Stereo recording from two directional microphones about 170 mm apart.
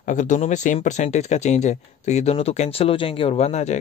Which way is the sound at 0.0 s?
45° left (ahead or behind).